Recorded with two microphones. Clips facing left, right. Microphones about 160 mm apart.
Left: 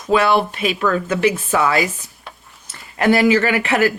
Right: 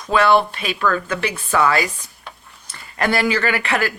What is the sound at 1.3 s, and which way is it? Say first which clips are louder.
Speech: even; 10° left (ahead or behind).